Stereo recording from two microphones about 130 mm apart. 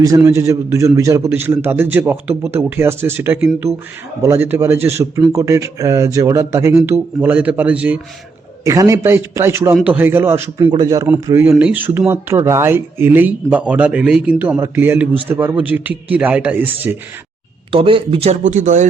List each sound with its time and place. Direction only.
0.3 s a man's voice: 20° right (ahead or behind)
7.2 s speech: 10° right (ahead or behind)
8.6 s a man's voice: 25° right (ahead or behind)
10.6 s a man's voice: 35° right (ahead or behind); by 17.0 s 15° right (ahead or behind)
17.7 s speech: 45° right (ahead or behind)
18.4 s speech: 70° right (ahead or behind)